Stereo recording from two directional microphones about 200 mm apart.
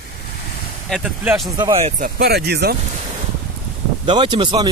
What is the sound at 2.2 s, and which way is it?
Speech, 55° right (ahead or behind).